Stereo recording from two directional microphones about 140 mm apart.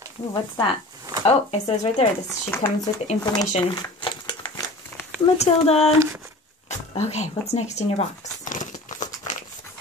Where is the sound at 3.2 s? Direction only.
30° left (ahead or behind).